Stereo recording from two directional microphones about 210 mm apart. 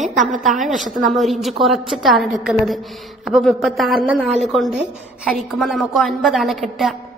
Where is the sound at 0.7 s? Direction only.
Centre (ahead or behind).